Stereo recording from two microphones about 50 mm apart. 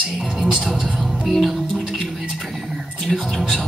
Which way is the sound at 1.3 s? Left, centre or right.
Centre.